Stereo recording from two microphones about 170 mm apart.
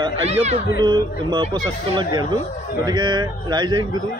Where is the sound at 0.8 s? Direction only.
25° right (ahead or behind).